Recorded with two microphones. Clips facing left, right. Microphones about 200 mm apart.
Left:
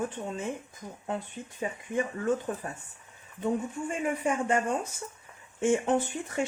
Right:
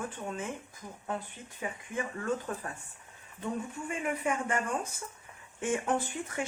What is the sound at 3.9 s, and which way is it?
Speech, 25° left (ahead or behind).